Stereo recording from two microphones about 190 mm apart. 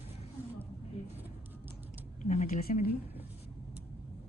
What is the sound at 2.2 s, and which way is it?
Speech, 35° left (ahead or behind).